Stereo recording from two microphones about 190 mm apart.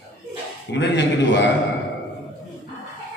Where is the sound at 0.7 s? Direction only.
70° left (ahead or behind).